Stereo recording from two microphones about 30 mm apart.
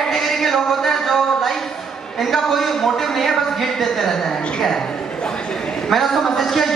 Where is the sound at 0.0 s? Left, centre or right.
Centre.